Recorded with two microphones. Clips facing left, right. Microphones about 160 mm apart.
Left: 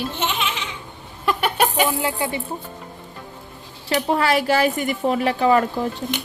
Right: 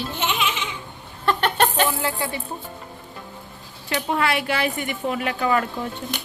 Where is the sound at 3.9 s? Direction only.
35° left (ahead or behind).